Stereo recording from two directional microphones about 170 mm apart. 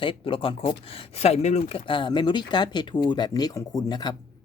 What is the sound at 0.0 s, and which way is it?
Speech, 30° left (ahead or behind).